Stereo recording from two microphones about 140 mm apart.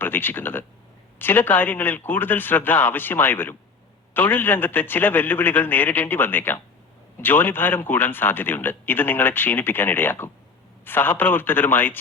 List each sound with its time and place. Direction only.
0.0 s a man's voice: 15° left (ahead or behind)